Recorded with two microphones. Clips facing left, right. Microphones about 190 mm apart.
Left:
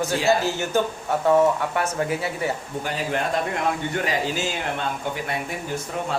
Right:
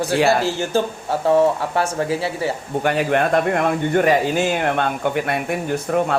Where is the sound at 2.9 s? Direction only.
65° right (ahead or behind).